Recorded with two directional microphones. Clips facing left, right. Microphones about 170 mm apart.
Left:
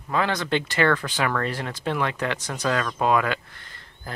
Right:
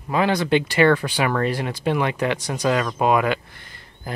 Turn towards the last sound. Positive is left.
turn(degrees=-15)  # may be behind; listen again after turning